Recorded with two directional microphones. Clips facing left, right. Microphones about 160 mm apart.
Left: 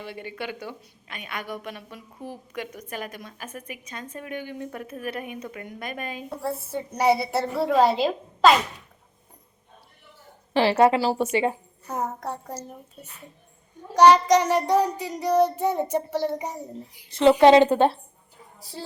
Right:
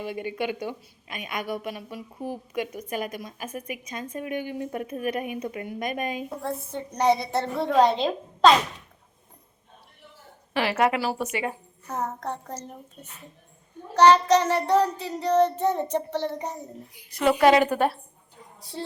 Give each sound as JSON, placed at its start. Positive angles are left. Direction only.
{"t": 0.0, "sound": "a woman's voice", "side_deg": -15}
{"t": 6.4, "sound": "a woman's voice", "side_deg": 5}
{"t": 10.5, "sound": "a woman's voice", "side_deg": 30}
{"t": 11.9, "sound": "child singing", "side_deg": 10}
{"t": 13.9, "sound": "child singing", "side_deg": 15}
{"t": 17.1, "sound": "a woman's voice", "side_deg": 25}